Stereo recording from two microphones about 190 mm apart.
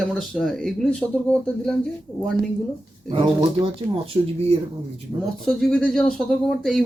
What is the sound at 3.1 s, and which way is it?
Speech, 30° right (ahead or behind).